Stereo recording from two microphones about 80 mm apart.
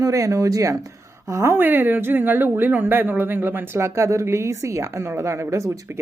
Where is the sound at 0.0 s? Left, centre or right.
Right.